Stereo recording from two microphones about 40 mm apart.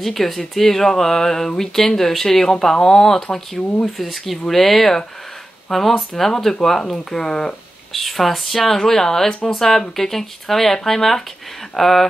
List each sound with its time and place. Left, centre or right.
0.0 s speech: centre
7.9 s speech: centre